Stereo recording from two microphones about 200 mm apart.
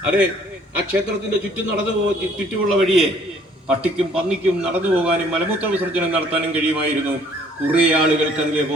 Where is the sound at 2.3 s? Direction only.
Centre (ahead or behind).